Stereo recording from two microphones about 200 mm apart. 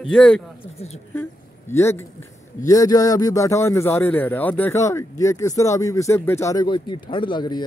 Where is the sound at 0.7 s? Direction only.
30° left (ahead or behind).